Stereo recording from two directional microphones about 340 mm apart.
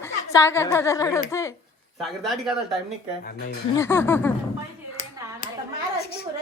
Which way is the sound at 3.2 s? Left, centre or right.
Left.